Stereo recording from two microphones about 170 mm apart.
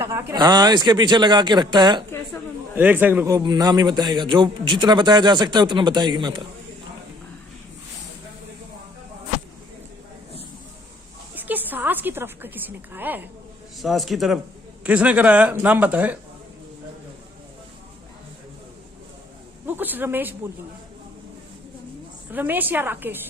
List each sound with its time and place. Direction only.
0.0 s a man's voice: 20° right (ahead or behind)
2.7 s a man's voice: 10° right (ahead or behind); by 6.4 s 25° right (ahead or behind)
11.3 s a woman's voice: 10° right (ahead or behind)
13.7 s a man's voice: centre (ahead or behind)
19.6 s a man's voice: 10° right (ahead or behind)
22.3 s a man's voice: 10° right (ahead or behind)